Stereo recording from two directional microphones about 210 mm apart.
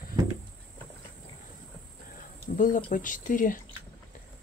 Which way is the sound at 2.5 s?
40° left (ahead or behind).